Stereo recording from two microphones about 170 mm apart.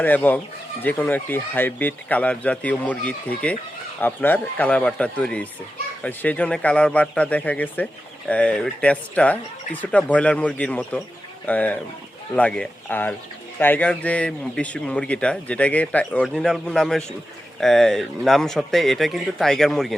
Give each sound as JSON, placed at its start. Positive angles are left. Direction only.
{"t": 0.0, "sound": "speech", "side_deg": 10}